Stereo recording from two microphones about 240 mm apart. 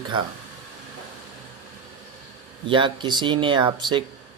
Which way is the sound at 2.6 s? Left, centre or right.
Centre.